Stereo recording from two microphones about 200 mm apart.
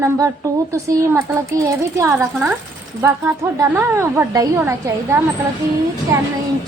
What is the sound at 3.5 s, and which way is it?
A woman's voice, 15° right (ahead or behind).